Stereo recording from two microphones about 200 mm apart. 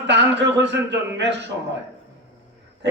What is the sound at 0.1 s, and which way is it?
A man's voice, 60° right (ahead or behind).